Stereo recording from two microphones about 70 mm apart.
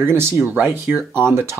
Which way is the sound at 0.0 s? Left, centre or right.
Right.